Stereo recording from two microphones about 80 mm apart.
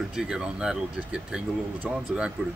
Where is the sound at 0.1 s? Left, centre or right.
Centre.